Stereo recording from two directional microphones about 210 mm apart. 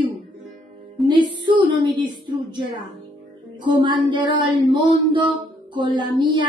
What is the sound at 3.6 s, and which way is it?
Speech, 20° right (ahead or behind).